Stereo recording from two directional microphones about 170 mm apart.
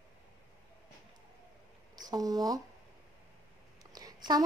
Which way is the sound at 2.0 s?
20° right (ahead or behind).